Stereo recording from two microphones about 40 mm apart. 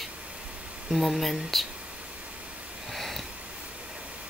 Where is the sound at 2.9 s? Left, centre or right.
Centre.